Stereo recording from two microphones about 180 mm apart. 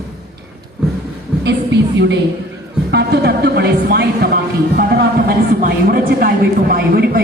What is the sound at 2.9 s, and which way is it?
Music, 65° right (ahead or behind).